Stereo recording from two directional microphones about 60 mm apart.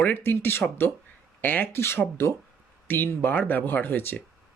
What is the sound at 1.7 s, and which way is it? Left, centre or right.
Speech, left.